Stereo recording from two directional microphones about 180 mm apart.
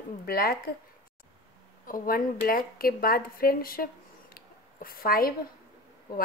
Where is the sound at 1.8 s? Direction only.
50° left (ahead or behind).